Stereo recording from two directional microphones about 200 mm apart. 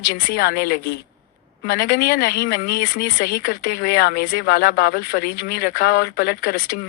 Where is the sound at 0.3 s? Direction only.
50° left (ahead or behind).